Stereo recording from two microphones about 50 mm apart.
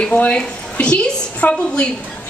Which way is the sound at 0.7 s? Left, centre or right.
Left.